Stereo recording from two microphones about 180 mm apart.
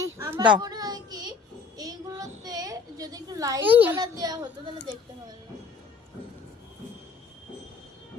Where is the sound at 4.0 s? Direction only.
20° right (ahead or behind).